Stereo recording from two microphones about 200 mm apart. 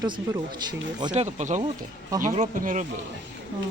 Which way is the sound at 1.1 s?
35° right (ahead or behind).